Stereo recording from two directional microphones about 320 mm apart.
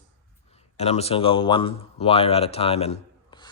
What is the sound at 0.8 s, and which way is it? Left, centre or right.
Speech, centre.